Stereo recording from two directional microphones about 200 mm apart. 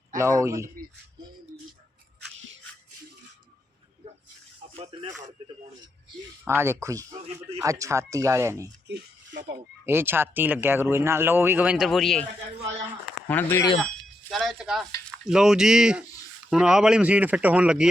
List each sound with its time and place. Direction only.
0.2 s speech: 15° right (ahead or behind)
4.7 s speech: 30° right (ahead or behind)
6.4 s speech: 10° right (ahead or behind)
9.8 s speech: 10° right (ahead or behind)
13.2 s speech: 10° left (ahead or behind)
13.7 s speech: centre (ahead or behind)